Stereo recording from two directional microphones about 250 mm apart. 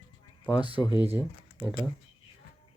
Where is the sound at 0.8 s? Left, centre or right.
Centre.